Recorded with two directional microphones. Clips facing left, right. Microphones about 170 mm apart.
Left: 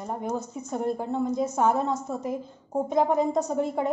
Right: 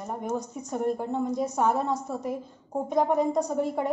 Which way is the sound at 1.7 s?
10° right (ahead or behind).